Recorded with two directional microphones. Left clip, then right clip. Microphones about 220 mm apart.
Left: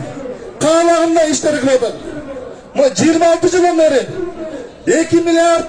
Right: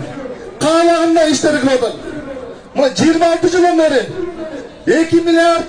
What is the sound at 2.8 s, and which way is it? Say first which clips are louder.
Music: left 1 dB; 20° left (ahead or behind).